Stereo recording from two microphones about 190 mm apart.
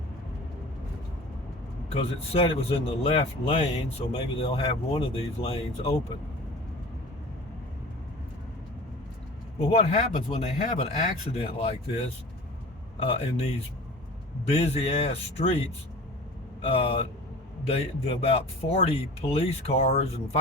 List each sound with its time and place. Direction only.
1.9 s speech: 35° left (ahead or behind)
9.7 s speech: 35° left (ahead or behind)
13.0 s speech: 30° left (ahead or behind)
16.6 s speech: 30° left (ahead or behind)